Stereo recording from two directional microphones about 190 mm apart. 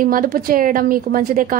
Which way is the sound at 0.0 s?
50° right (ahead or behind).